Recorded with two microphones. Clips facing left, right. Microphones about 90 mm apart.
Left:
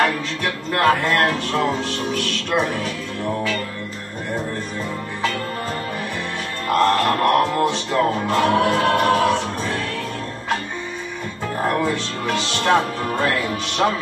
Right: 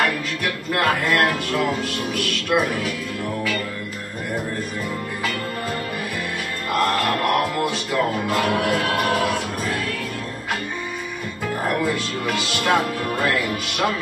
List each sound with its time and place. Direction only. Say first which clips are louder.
0.0 s music: left 2 dB; 35° left (ahead or behind)
6.7 s music: left 4 dB; 35° left (ahead or behind)
11.8 s music: left 1 dB; 30° left (ahead or behind)